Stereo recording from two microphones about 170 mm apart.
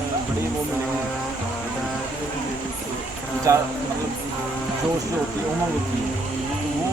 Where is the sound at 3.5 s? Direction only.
20° right (ahead or behind).